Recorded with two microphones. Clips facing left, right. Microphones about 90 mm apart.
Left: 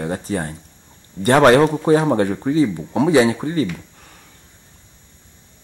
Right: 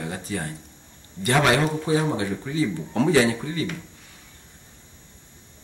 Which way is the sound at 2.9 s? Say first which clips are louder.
Left 5 dB; 20° left (ahead or behind).